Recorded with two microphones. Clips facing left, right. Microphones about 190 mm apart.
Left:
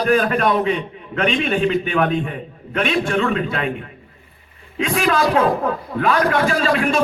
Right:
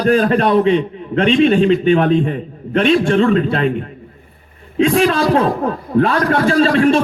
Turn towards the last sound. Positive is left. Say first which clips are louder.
# right 6 dB
turn(degrees=-35)  # may be behind; listen again after turning